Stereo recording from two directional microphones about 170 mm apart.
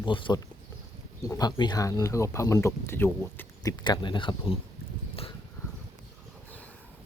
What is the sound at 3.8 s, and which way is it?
Speech, 25° left (ahead or behind).